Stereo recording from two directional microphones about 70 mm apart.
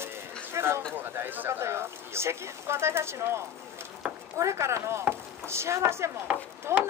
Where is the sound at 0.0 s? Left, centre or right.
Right.